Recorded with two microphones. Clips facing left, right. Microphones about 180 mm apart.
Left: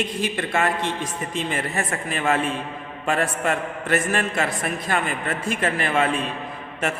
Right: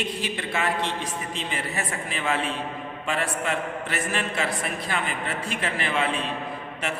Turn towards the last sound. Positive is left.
turn(degrees=45)  # may be behind; listen again after turning